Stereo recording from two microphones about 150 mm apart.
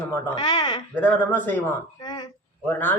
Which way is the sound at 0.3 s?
30° left (ahead or behind).